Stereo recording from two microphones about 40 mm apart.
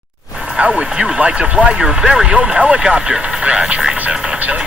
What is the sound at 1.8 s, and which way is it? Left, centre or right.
Speech, centre.